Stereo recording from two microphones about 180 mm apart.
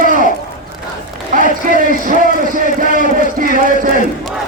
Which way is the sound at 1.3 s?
50° right (ahead or behind).